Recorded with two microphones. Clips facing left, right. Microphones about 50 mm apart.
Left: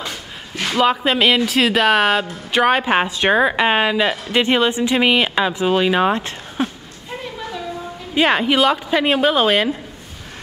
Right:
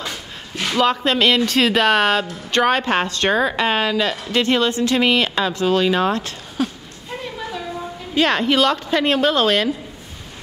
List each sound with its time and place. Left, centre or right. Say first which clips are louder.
0.0 s speech: even; centre; by 6.7 s left
7.1 s a sound: even; centre
8.1 s speech: left 1 dB; centre